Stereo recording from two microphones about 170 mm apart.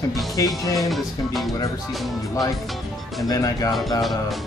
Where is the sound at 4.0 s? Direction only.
Centre (ahead or behind).